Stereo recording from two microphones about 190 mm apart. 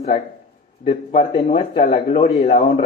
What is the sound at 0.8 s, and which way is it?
A man's voice, 35° left (ahead or behind).